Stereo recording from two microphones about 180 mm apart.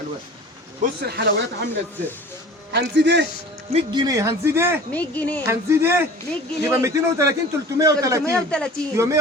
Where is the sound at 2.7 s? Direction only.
70° right (ahead or behind).